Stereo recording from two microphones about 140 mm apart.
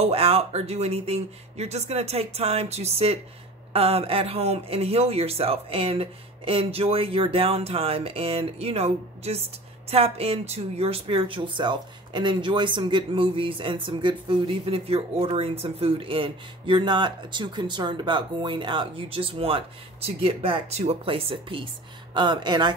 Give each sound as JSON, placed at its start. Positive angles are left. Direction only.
{"t": 0.0, "sound": "a man's voice", "side_deg": -45}